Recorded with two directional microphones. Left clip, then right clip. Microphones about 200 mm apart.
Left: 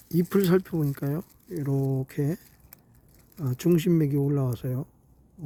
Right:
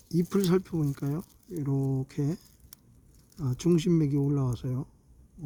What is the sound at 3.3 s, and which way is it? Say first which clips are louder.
Speech: left 2 dB; 15° left (ahead or behind).